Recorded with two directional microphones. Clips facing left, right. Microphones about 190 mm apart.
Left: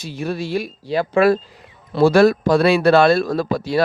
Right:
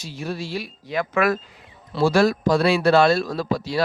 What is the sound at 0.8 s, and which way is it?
Speech, 30° left (ahead or behind).